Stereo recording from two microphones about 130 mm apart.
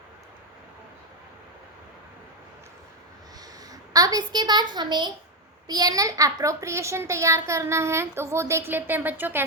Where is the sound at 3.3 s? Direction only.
30° right (ahead or behind).